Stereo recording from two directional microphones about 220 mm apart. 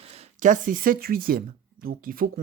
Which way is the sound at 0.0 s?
30° right (ahead or behind).